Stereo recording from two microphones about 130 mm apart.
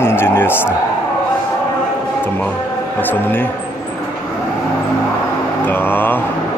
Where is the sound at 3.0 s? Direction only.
15° left (ahead or behind).